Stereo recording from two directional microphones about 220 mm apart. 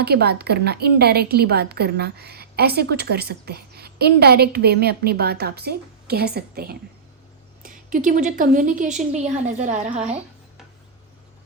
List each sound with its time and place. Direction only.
0.0 s a woman's voice: 45° right (ahead or behind); by 10.2 s 30° right (ahead or behind)